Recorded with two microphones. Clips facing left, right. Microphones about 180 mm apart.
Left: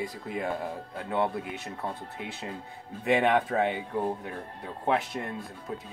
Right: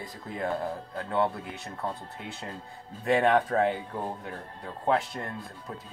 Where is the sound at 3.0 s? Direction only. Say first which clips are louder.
Right 1 dB; 20° left (ahead or behind).